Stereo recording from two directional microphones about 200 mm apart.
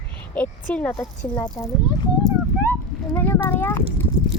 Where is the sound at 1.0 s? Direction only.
20° left (ahead or behind).